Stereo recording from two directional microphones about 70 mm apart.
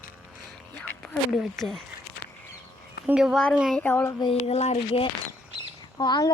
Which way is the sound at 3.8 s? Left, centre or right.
Left.